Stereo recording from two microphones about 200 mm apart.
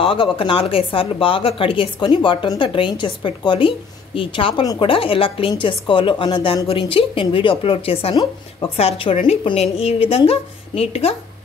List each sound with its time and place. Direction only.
0.0 s speech: 25° left (ahead or behind)